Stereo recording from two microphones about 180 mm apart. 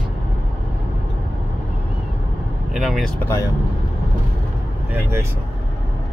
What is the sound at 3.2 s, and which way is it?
Speech, 15° left (ahead or behind).